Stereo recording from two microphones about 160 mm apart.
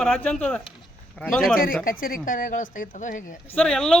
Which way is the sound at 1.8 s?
60° left (ahead or behind).